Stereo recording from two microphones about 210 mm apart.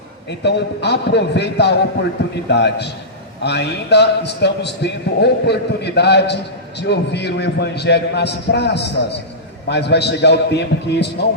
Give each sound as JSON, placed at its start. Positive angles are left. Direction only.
{"t": 0.3, "sound": "a man's voice", "side_deg": 55}